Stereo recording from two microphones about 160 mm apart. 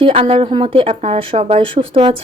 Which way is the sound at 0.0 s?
35° right (ahead or behind).